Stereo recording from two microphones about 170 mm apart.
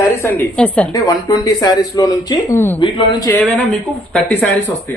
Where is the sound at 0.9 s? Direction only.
20° left (ahead or behind).